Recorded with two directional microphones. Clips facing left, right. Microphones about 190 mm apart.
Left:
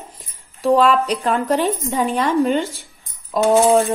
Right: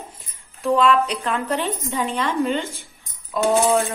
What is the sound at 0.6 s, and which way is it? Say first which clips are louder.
A woman's voice: left 3 dB; 35° left (ahead or behind).